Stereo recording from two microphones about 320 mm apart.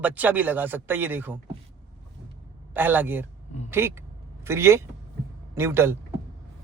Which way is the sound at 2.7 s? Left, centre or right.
Centre.